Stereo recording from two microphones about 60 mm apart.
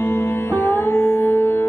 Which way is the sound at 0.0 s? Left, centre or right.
Left.